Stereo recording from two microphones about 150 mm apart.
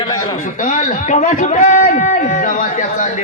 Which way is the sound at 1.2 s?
60° left (ahead or behind).